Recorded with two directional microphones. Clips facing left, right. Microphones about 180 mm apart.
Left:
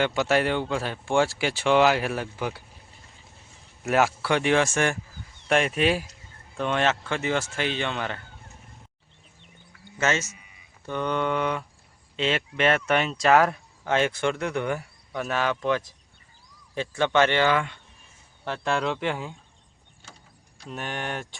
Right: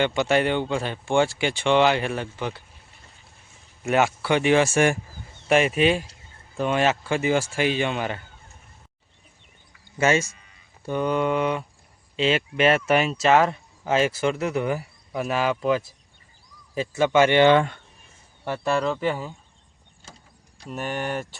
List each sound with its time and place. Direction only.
0.0 s speech: centre (ahead or behind)
3.8 s speech: centre (ahead or behind)
10.0 s speech: 10° right (ahead or behind)
17.4 s speech: 25° right (ahead or behind)
18.4 s speech: 5° right (ahead or behind)
20.7 s speech: 5° right (ahead or behind)